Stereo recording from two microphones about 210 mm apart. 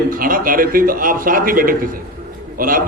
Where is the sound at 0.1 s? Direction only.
40° right (ahead or behind).